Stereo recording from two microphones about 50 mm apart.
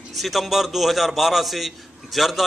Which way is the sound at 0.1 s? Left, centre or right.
Centre.